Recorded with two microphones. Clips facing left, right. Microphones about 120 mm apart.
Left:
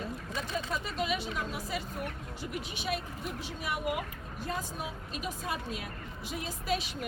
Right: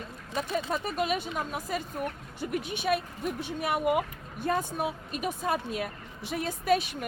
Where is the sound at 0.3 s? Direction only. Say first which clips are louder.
Right 6 dB; 50° right (ahead or behind).